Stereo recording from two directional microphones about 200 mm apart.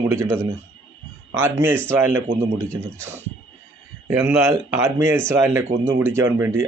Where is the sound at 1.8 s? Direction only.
10° right (ahead or behind).